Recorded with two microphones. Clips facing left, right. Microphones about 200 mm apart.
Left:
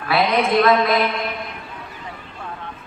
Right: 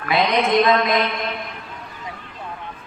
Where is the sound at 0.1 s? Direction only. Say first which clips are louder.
Even; 20° right (ahead or behind).